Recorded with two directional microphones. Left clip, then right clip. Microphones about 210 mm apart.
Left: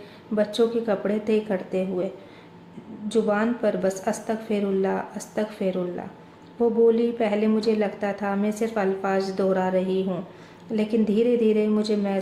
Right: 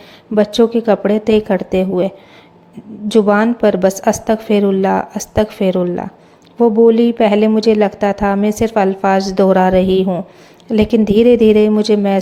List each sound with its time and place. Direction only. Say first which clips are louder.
0.3 s a woman's voice: right 10 dB; 35° right (ahead or behind)
3.1 s a woman's voice: right 11 dB; 40° right (ahead or behind)